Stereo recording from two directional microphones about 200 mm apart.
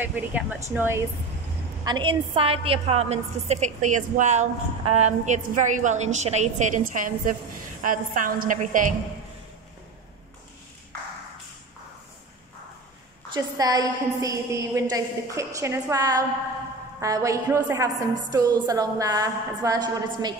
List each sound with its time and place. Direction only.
0.0 s a woman's voice: 10° right (ahead or behind)
1.9 s a woman's voice: 25° right (ahead or behind); by 8.9 s 40° right (ahead or behind)
13.3 s a woman's voice: 20° right (ahead or behind)